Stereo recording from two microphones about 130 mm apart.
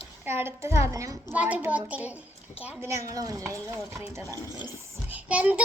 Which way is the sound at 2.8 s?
25° right (ahead or behind).